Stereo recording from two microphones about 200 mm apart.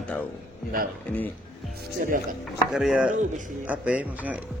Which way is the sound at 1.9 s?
50° right (ahead or behind).